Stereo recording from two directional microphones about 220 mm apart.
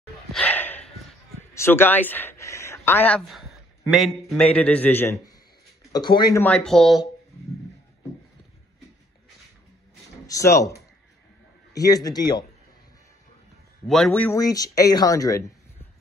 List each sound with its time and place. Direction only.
0.3 s a sound: 5° left (ahead or behind)
1.5 s a man's voice: 10° left (ahead or behind)
5.9 s speech: 20° left (ahead or behind); by 7.1 s centre (ahead or behind)
10.2 s speech: 15° left (ahead or behind)
13.8 s speech: centre (ahead or behind)